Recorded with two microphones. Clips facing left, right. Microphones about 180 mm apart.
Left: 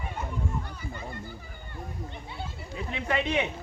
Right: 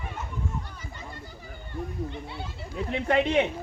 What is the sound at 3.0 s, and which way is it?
Speech, 50° right (ahead or behind).